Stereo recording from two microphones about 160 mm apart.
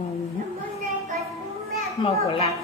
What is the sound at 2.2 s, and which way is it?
Speech, 40° left (ahead or behind).